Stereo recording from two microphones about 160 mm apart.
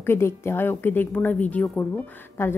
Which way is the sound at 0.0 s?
15° left (ahead or behind).